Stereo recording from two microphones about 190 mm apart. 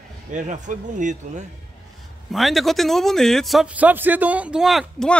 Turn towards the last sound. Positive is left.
turn(degrees=0)  # may be behind; listen again after turning